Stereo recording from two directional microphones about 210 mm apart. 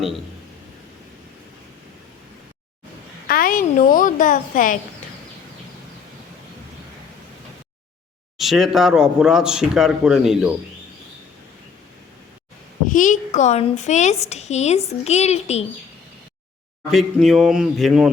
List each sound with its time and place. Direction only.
3.2 s a woman's voice: 45° left (ahead or behind)
8.4 s speech: centre (ahead or behind)
12.9 s a child's voice: 35° left (ahead or behind)
16.9 s speech: centre (ahead or behind)